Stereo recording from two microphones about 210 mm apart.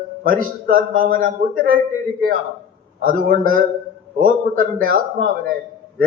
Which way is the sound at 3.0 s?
40° right (ahead or behind).